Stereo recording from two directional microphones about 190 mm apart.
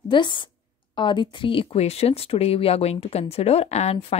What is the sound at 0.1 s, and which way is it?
Speech, 25° left (ahead or behind).